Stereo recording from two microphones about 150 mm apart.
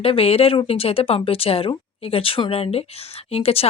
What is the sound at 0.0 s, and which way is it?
Speech, 40° left (ahead or behind).